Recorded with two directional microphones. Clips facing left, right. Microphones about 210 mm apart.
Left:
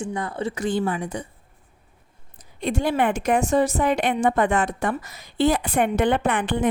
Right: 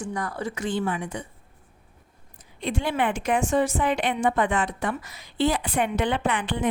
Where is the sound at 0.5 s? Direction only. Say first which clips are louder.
Left 3 dB; 40° left (ahead or behind).